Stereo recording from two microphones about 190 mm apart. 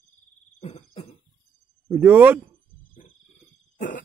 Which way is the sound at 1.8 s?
10° right (ahead or behind).